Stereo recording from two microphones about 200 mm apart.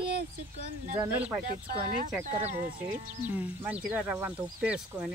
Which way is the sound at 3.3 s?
10° right (ahead or behind).